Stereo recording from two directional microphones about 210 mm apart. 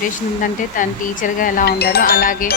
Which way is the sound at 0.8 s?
40° left (ahead or behind).